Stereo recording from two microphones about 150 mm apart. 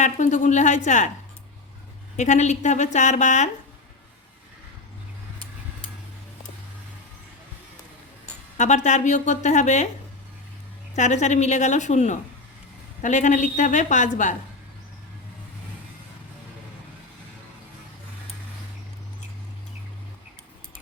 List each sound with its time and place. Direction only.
0.0 s a woman's voice: 55° left (ahead or behind)
2.1 s a woman's voice: 55° left (ahead or behind)
8.5 s a woman's voice: 55° left (ahead or behind)
10.9 s a woman's voice: 55° left (ahead or behind)